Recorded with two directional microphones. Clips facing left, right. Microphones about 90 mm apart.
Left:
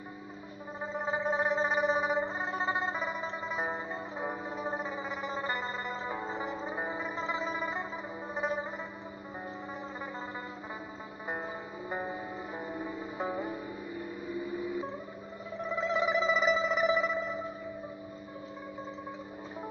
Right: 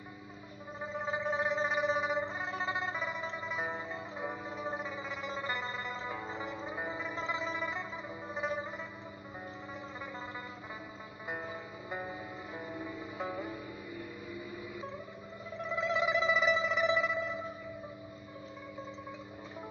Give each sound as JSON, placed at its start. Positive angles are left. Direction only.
{"t": 0.7, "sound": "gargling", "side_deg": 35}
{"t": 1.3, "sound": "a sound", "side_deg": 45}
{"t": 3.4, "sound": "music", "side_deg": 40}
{"t": 11.2, "sound": "music", "side_deg": 30}